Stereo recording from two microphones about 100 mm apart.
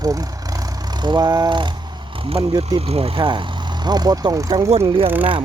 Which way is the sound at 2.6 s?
90° right.